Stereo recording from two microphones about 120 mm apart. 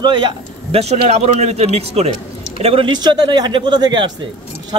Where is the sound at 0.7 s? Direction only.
60° right (ahead or behind).